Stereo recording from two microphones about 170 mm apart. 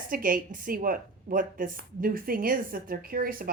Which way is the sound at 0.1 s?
55° right (ahead or behind).